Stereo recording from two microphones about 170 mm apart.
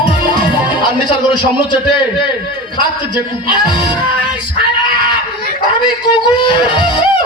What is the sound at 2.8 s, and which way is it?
Speech, 25° left (ahead or behind).